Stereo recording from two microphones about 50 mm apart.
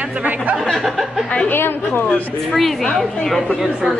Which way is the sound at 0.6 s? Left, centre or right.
Centre.